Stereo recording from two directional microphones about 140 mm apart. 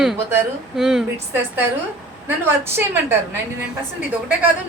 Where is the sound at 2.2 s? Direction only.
15° right (ahead or behind).